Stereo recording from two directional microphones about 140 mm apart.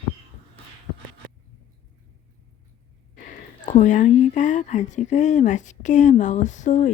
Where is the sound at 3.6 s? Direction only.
60° left (ahead or behind).